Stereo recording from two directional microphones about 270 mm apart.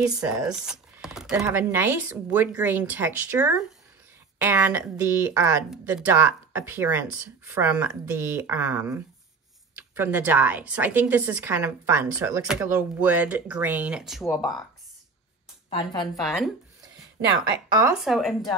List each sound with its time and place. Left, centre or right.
0.4 s a woman's voice: centre
16.2 s speech: centre
17.7 s speech: centre